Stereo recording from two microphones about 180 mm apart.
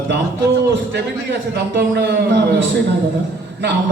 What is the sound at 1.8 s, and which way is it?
Speech, 70° right (ahead or behind).